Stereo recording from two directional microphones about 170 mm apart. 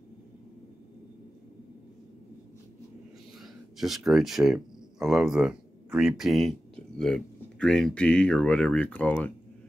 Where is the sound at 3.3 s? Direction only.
Centre (ahead or behind).